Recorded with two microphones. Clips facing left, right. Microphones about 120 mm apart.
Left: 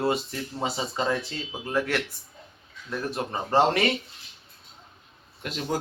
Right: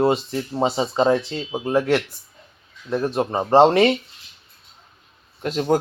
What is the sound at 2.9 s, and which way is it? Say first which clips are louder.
Speech: right 8 dB; 35° right (ahead or behind).